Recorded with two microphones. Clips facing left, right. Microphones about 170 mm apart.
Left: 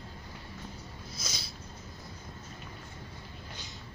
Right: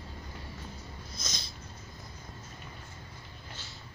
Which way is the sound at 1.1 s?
5° left (ahead or behind).